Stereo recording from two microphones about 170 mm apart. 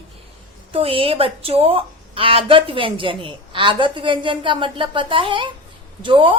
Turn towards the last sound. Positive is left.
turn(degrees=-30)  # may be behind; listen again after turning